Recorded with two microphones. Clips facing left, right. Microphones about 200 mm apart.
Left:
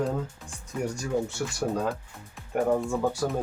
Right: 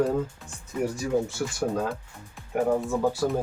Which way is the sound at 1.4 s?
5° right (ahead or behind).